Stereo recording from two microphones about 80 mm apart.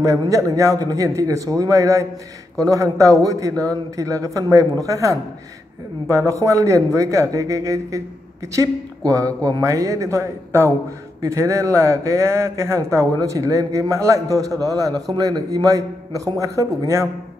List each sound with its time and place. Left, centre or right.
0.0 s speech: right